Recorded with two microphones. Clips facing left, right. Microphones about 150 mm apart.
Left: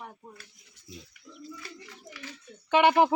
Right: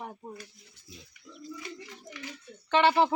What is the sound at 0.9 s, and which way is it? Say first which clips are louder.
Speech: left 5 dB; 25° left (ahead or behind).